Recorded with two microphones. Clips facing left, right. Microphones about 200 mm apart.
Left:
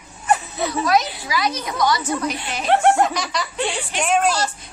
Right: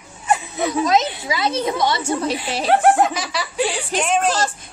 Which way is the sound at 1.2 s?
25° right (ahead or behind).